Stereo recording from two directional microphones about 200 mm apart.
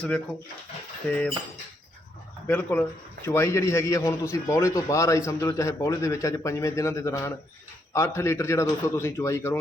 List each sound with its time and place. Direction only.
1.1 s a man's voice: 5° left (ahead or behind)
2.5 s a man's voice: 10° left (ahead or behind)